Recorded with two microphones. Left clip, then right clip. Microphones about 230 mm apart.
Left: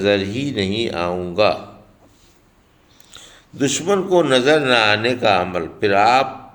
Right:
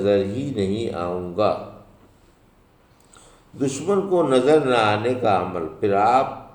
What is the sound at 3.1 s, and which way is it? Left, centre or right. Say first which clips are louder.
A man's voice: left 6 dB; left.